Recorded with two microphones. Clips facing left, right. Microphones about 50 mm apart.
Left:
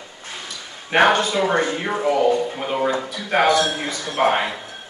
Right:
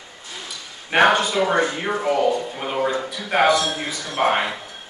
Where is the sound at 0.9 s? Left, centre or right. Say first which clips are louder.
Even; centre.